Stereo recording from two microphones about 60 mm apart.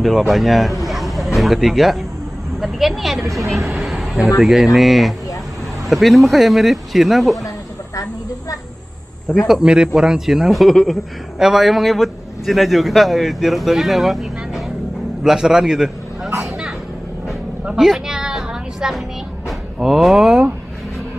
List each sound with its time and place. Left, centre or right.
0.3 s a man's voice: centre
7.4 s snake: left
9.5 s a man's voice: centre
17.6 s a sound: centre
19.8 s a man's voice: centre